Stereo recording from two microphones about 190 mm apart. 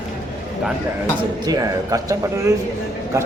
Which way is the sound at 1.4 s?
15° right (ahead or behind).